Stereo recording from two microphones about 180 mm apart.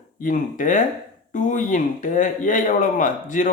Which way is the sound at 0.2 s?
50° left (ahead or behind).